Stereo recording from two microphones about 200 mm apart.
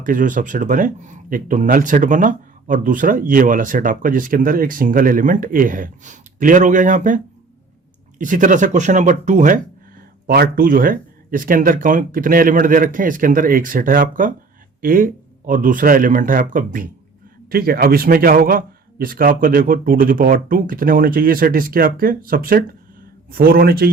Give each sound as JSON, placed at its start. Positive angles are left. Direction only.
{"t": 0.0, "sound": "speech", "side_deg": -40}
{"t": 8.2, "sound": "speech", "side_deg": -40}
{"t": 10.2, "sound": "a man's voice", "side_deg": -50}